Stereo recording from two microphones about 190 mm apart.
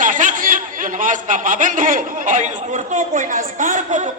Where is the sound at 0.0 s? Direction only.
45° right (ahead or behind).